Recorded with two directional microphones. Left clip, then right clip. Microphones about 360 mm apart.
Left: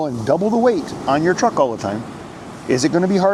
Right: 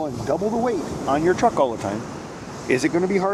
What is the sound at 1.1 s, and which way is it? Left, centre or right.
Speech, left.